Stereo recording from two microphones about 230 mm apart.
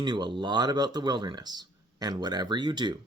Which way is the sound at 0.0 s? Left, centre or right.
Centre.